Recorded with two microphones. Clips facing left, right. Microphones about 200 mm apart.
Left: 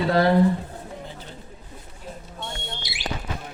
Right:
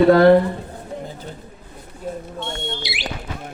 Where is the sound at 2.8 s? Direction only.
70° right (ahead or behind).